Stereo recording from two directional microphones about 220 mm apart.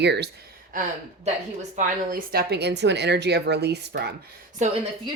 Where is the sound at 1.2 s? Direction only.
35° right (ahead or behind); by 4.1 s 50° right (ahead or behind).